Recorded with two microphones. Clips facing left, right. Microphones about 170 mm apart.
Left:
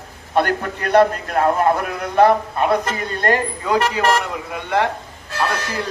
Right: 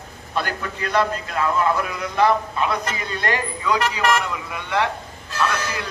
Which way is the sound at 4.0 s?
35° left (ahead or behind).